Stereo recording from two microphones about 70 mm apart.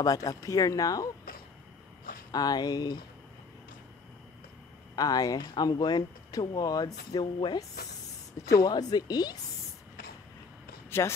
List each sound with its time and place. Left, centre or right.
0.0 s speech: left
2.3 s speech: left
4.9 s speech: left
8.6 s speech: left
10.9 s speech: left